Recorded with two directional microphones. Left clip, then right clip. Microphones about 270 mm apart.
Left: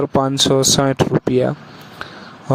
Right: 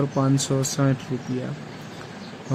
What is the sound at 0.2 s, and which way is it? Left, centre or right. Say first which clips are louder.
Speech: left 11 dB; left.